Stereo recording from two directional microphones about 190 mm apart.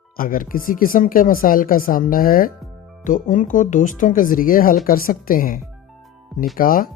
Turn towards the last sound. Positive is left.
turn(degrees=50)  # may be behind; listen again after turning